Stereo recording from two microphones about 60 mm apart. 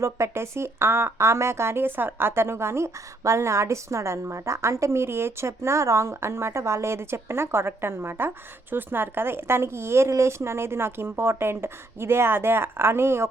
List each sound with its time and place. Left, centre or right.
0.0 s speech: right